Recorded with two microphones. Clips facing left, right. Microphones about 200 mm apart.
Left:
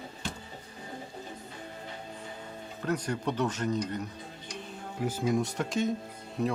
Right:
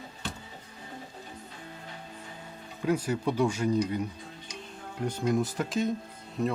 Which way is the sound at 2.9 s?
5° right (ahead or behind).